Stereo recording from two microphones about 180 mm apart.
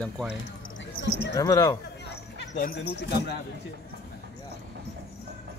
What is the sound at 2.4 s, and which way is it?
Speech, 70° left (ahead or behind).